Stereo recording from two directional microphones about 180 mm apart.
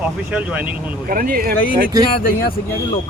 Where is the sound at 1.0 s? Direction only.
50° right (ahead or behind).